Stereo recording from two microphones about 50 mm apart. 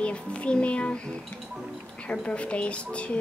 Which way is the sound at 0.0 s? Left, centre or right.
Left.